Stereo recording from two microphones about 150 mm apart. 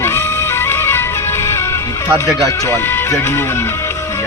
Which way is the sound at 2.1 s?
20° left (ahead or behind).